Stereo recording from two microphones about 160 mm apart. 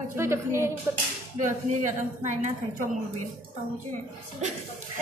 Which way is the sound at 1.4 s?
50° right (ahead or behind).